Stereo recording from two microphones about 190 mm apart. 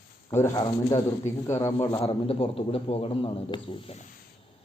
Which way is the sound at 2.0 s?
30° left (ahead or behind).